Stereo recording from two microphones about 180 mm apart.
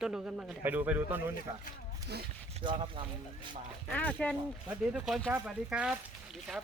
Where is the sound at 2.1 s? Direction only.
65° right (ahead or behind).